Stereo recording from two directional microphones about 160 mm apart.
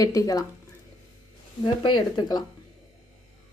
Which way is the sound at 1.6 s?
30° left (ahead or behind).